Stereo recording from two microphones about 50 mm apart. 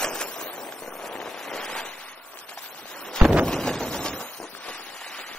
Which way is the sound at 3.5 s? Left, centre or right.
Centre.